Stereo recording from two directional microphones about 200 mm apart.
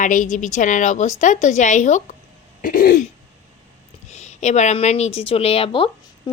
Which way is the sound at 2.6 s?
45° left (ahead or behind).